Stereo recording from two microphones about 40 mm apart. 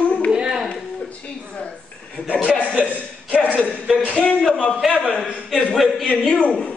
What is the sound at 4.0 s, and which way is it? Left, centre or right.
Speech, left.